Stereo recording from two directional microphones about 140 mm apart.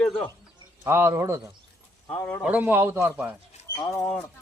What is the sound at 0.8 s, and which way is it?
Speech, 20° right (ahead or behind).